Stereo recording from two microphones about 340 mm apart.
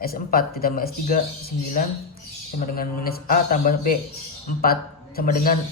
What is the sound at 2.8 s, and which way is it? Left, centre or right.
Speech, left.